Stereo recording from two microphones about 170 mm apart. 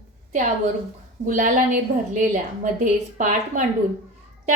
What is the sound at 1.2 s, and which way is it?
A woman's voice, 50° right (ahead or behind).